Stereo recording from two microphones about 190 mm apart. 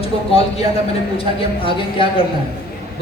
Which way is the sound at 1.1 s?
30° left (ahead or behind).